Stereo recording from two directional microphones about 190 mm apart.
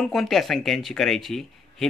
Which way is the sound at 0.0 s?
Centre (ahead or behind).